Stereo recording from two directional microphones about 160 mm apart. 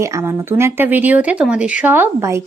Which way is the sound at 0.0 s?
20° right (ahead or behind).